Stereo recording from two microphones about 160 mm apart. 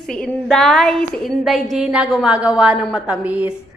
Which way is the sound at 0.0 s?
5° left (ahead or behind).